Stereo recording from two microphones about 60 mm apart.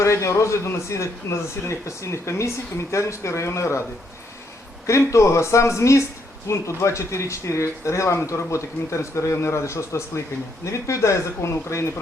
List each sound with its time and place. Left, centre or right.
0.0 s a man's voice: left
4.9 s speech: left